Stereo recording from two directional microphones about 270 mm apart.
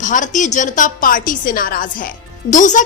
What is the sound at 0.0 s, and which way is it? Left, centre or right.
A woman's voice, left.